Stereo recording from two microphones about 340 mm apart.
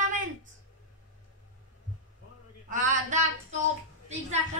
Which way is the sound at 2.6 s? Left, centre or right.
Right.